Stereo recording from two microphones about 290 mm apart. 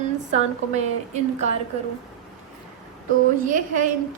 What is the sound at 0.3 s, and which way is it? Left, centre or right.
A woman's voice, right.